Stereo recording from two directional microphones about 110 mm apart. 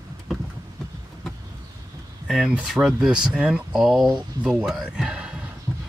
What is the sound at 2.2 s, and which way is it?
Speech, 5° right (ahead or behind).